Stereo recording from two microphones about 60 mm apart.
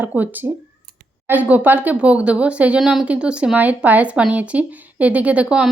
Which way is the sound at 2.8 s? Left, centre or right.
Centre.